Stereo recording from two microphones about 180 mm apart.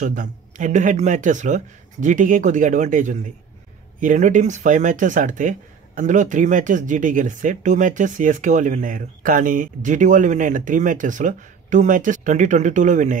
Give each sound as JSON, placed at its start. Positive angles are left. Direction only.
{"t": 0.0, "sound": "speech", "side_deg": -45}